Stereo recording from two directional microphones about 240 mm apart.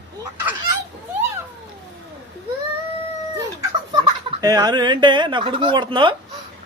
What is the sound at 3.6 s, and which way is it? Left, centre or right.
Speech, centre.